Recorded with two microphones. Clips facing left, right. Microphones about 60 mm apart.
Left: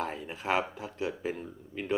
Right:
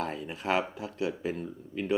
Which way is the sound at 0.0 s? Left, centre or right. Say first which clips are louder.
Right 1 dB; centre.